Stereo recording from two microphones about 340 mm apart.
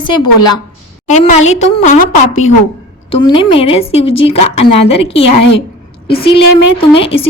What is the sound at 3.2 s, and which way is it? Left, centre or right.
A woman's voice, centre.